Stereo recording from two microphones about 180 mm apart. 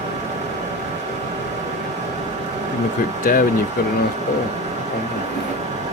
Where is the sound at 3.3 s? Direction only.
50° left (ahead or behind).